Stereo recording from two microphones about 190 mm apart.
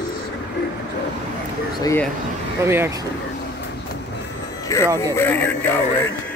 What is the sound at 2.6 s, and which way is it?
Speech, 15° right (ahead or behind).